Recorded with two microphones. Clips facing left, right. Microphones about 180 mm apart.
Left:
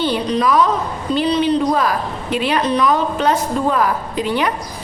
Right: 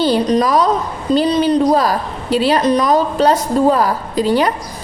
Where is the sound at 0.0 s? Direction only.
40° right (ahead or behind).